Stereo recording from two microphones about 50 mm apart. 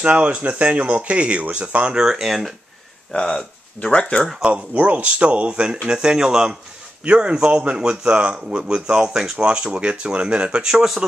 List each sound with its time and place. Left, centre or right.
0.0 s speech: right
2.0 s speech: centre
3.1 s speech: centre
4.5 s speech: right